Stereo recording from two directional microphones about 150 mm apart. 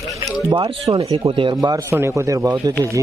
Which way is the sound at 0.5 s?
35° right (ahead or behind).